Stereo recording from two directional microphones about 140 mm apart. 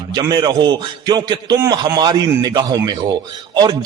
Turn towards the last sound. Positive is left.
turn(degrees=-30)  # may be behind; listen again after turning